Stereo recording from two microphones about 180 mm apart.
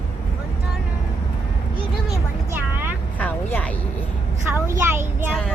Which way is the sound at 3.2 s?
10° left (ahead or behind).